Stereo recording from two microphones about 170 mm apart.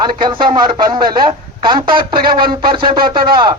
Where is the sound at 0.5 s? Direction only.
25° right (ahead or behind).